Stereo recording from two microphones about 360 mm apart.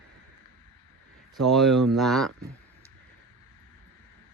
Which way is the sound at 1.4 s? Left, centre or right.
Centre.